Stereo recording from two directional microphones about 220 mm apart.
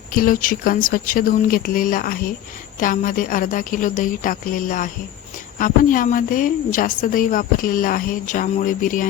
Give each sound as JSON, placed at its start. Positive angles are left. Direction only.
{"t": 0.1, "sound": "a woman's voice", "side_deg": 40}